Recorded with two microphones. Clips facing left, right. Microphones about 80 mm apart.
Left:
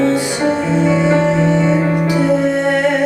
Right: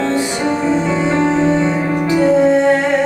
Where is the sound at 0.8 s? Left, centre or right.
Centre.